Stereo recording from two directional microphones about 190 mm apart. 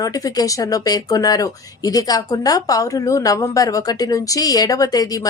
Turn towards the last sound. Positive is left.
turn(degrees=20)  # may be behind; listen again after turning